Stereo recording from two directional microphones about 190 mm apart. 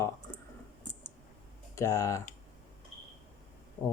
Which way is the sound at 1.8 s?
15° left (ahead or behind).